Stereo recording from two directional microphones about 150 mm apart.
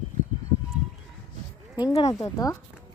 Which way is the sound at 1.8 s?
30° left (ahead or behind).